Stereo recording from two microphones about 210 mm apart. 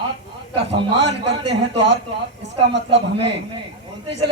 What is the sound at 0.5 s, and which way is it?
Speech, 55° right (ahead or behind).